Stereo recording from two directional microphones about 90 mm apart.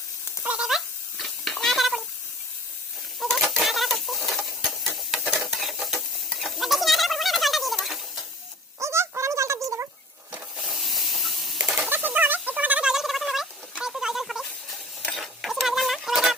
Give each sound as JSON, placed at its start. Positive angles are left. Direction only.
{"t": 0.4, "sound": "cat", "side_deg": -10}
{"t": 3.2, "sound": "chicken", "side_deg": 0}
{"t": 4.3, "sound": "stir", "side_deg": 0}
{"t": 8.8, "sound": "fowl", "side_deg": -30}
{"t": 10.6, "sound": "hiss", "side_deg": 0}
{"t": 11.5, "sound": "a sound", "side_deg": -20}
{"t": 12.9, "sound": "rodents", "side_deg": -5}
{"t": 15.0, "sound": "a sound", "side_deg": 0}